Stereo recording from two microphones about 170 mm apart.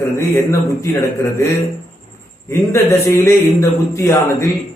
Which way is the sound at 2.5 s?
15° left (ahead or behind).